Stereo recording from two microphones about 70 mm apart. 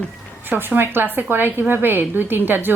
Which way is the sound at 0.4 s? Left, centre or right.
Right.